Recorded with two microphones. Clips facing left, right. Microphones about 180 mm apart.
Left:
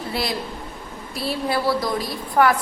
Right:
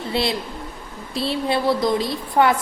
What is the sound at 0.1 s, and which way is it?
A woman's voice, 25° right (ahead or behind).